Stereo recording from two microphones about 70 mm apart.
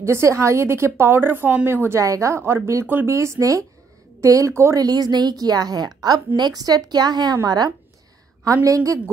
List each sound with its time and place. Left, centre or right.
0.0 s a woman's voice: right
2.0 s a woman's voice: right
3.1 s speech: right
4.7 s a woman's voice: right